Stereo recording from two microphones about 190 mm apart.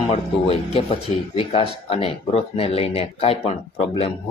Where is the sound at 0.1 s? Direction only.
30° left (ahead or behind).